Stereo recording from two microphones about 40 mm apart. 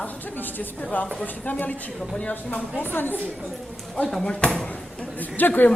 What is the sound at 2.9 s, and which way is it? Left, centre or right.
Speech, left.